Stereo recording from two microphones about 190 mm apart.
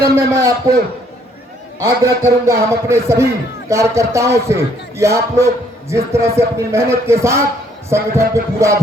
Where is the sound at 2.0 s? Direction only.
15° right (ahead or behind).